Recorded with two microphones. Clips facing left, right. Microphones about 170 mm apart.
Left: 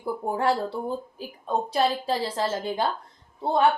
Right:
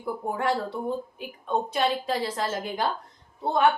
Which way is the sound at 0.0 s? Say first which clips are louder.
Left 3 dB; 30° left (ahead or behind).